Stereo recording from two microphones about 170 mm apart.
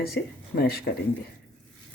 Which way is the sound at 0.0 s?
65° left (ahead or behind).